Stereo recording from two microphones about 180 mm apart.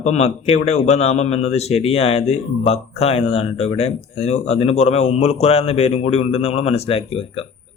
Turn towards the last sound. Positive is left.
turn(degrees=30)  # may be behind; listen again after turning